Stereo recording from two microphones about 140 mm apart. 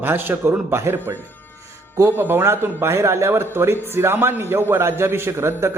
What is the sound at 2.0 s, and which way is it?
Speech, 15° right (ahead or behind).